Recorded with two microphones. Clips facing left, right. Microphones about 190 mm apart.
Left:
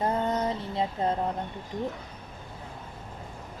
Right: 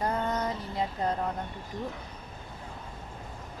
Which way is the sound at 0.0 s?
25° left (ahead or behind).